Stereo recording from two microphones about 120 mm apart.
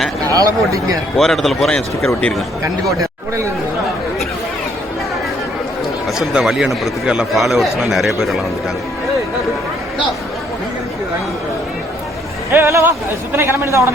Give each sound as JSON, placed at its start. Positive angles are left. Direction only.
{"t": 0.3, "sound": "speech", "side_deg": -30}
{"t": 1.1, "sound": "a man's voice", "side_deg": 0}
{"t": 6.1, "sound": "a man's voice", "side_deg": -5}
{"t": 12.5, "sound": "speech", "side_deg": -25}